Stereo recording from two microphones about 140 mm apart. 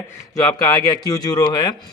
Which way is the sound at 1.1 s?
30° left (ahead or behind).